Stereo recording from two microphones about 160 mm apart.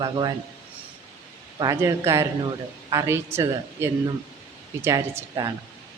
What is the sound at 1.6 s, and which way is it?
A woman's voice, 20° right (ahead or behind).